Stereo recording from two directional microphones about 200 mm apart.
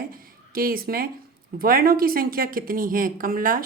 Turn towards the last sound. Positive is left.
turn(degrees=-45)  # may be behind; listen again after turning